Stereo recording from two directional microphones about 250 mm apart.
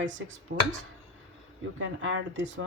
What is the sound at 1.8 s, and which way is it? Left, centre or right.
Speech, right.